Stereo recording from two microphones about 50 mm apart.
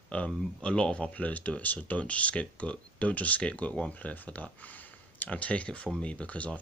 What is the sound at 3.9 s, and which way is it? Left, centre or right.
Speech, left.